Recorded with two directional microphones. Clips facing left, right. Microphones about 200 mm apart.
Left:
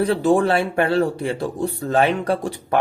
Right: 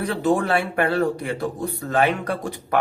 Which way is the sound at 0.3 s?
30° left (ahead or behind).